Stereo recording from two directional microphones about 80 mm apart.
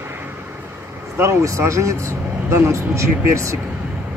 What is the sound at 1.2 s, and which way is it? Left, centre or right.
Speech, right.